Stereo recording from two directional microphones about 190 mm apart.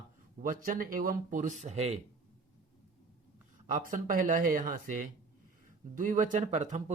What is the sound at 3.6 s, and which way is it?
Speech, 40° right (ahead or behind).